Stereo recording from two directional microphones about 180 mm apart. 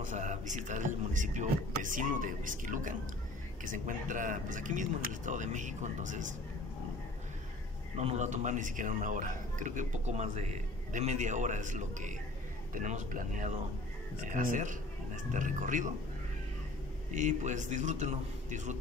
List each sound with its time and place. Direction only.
0.0 s a man's voice: 45° right (ahead or behind)
8.0 s a man's voice: 40° right (ahead or behind)
17.1 s a man's voice: 40° right (ahead or behind)